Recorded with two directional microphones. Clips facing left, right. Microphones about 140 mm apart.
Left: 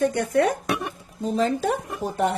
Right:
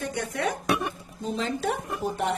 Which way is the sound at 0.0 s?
50° left (ahead or behind).